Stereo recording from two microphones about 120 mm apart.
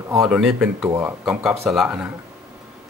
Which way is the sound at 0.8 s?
20° right (ahead or behind).